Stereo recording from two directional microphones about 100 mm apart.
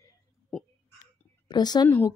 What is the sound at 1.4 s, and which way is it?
Speech, 45° left (ahead or behind).